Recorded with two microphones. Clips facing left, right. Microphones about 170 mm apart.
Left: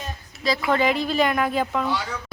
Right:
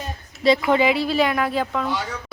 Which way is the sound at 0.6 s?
10° right (ahead or behind).